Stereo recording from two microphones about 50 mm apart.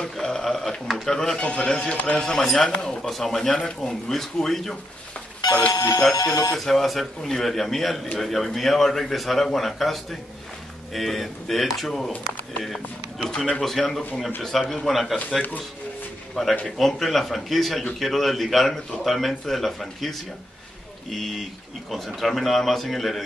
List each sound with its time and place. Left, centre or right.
0.0 s speech: centre
1.4 s a man's voice: left
2.0 s speech: centre
5.8 s speech: left
6.5 s speech: centre
16.4 s speech: centre